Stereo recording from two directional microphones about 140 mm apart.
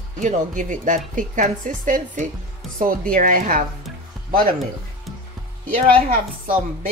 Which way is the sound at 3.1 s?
85° right.